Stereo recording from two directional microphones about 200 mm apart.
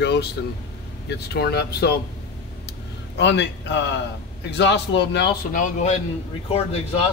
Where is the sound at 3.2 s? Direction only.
60° left (ahead or behind).